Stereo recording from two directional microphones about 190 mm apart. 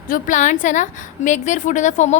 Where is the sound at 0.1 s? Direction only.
40° left (ahead or behind).